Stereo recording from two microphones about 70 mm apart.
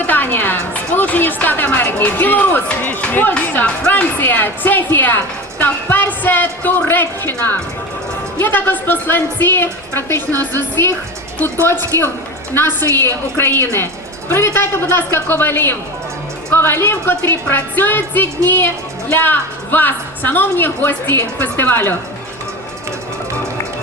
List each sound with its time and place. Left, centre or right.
0.1 s a woman's voice: left
11.6 s a woman's voice: left